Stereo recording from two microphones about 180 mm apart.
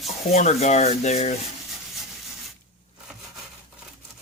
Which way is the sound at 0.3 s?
35° left (ahead or behind).